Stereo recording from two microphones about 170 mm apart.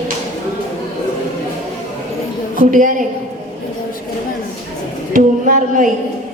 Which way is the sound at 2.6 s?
50° right (ahead or behind).